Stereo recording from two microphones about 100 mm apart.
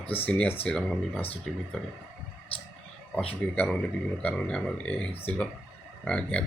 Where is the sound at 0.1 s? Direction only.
15° left (ahead or behind).